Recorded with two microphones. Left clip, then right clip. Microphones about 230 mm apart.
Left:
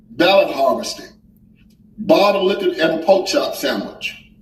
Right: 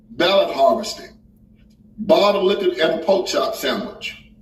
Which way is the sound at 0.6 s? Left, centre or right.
Left.